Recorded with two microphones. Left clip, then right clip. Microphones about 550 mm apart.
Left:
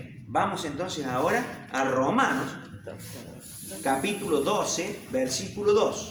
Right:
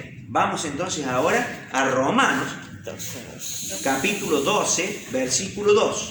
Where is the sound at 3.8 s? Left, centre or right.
Left.